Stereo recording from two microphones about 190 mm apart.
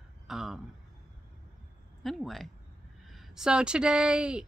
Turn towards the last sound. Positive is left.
turn(degrees=-5)  # may be behind; listen again after turning